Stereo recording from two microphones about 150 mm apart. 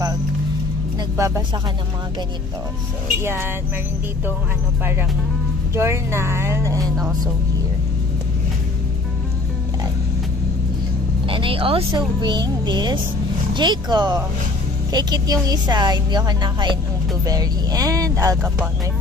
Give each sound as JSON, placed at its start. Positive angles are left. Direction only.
{"t": 1.1, "sound": "speech", "side_deg": -20}
{"t": 5.8, "sound": "speech", "side_deg": -15}
{"t": 11.2, "sound": "speech", "side_deg": -35}